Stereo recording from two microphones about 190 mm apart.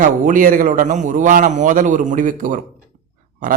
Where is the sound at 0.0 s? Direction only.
45° right (ahead or behind).